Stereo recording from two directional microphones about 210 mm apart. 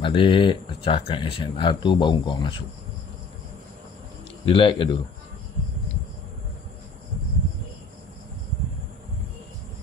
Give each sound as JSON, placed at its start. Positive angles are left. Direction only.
{"t": 0.0, "sound": "speech", "side_deg": 25}
{"t": 4.5, "sound": "speech", "side_deg": 25}